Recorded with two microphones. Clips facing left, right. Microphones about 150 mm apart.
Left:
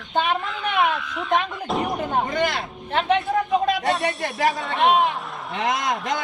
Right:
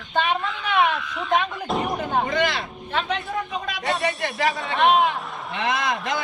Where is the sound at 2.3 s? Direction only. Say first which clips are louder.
Even; 50° left (ahead or behind).